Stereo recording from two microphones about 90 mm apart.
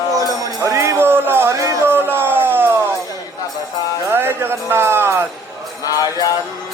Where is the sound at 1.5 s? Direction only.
35° right (ahead or behind).